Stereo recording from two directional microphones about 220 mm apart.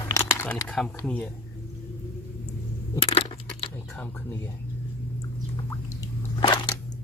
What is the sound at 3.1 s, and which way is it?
Coin, 25° left (ahead or behind).